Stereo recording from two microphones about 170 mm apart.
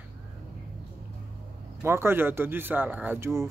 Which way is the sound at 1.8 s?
15° right (ahead or behind).